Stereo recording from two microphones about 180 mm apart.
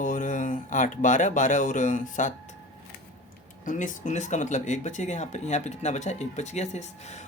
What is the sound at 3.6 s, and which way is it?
Speech, 45° left (ahead or behind).